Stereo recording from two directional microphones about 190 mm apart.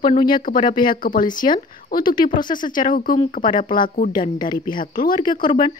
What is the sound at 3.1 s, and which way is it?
Speech, 35° left (ahead or behind).